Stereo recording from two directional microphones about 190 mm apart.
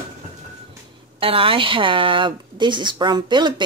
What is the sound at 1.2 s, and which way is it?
Speech, 30° right (ahead or behind).